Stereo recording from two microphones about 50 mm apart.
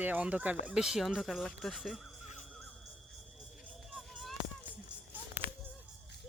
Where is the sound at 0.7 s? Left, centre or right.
Centre.